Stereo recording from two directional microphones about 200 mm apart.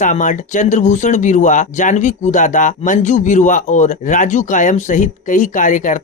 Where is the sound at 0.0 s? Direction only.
40° left (ahead or behind).